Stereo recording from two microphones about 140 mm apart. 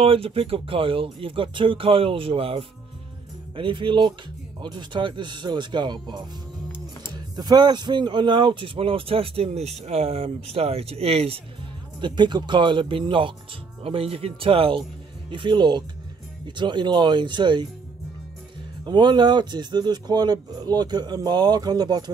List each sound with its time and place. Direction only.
0.0 s speech: 40° right (ahead or behind)
12.0 s speech: 30° right (ahead or behind)
18.9 s speech: 35° right (ahead or behind)